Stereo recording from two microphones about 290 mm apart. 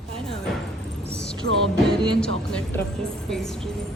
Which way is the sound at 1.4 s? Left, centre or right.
Right.